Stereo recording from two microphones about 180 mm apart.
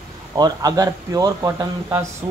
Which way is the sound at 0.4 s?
20° right (ahead or behind).